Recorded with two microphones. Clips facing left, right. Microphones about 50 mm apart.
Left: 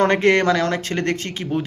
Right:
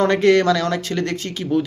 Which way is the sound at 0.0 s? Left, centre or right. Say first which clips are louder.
Right 1 dB; left.